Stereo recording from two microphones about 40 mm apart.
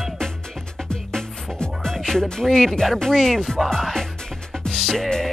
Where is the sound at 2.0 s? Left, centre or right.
Centre.